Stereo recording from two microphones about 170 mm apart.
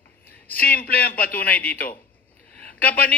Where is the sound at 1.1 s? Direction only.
10° left (ahead or behind).